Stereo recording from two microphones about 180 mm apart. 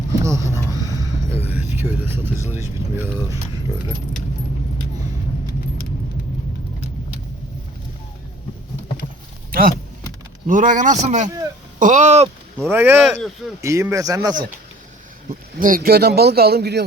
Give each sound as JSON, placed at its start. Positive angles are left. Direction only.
{"t": 0.1, "sound": "speech", "side_deg": -15}
{"t": 0.9, "sound": "a sound", "side_deg": -20}
{"t": 1.7, "sound": "speech", "side_deg": -10}
{"t": 9.5, "sound": "speech", "side_deg": -55}
{"t": 12.5, "sound": "speech", "side_deg": -10}
{"t": 13.0, "sound": "speech", "side_deg": 0}
{"t": 13.6, "sound": "a man's voice", "side_deg": -15}
{"t": 15.3, "sound": "speech", "side_deg": -50}